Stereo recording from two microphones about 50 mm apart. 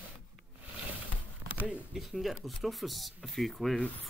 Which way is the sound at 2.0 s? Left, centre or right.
Centre.